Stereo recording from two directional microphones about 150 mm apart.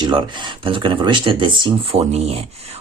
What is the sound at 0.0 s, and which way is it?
Speech, 30° right (ahead or behind).